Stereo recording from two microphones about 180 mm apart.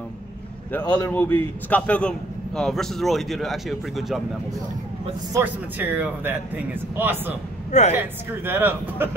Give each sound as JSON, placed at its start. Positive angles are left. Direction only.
{"t": 0.7, "sound": "a man's voice", "side_deg": 10}
{"t": 5.3, "sound": "a man's voice", "side_deg": -10}